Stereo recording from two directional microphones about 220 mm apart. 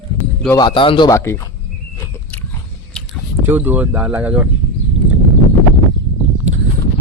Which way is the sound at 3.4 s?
10° right (ahead or behind).